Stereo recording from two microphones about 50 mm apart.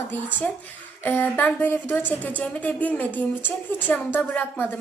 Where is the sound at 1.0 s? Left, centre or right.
Left.